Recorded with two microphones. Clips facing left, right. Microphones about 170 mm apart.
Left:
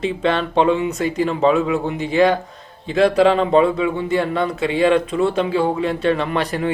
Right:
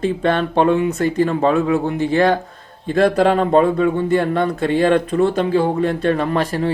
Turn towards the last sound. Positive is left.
turn(degrees=-45)  # may be behind; listen again after turning